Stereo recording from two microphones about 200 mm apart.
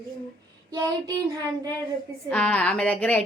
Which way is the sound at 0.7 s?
20° right (ahead or behind).